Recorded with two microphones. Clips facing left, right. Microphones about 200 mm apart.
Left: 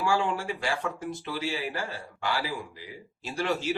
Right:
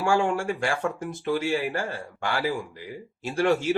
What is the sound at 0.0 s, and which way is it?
A man's voice, 50° right (ahead or behind).